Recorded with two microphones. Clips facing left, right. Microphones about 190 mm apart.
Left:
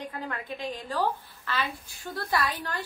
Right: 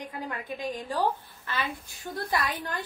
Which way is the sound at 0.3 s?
15° right (ahead or behind).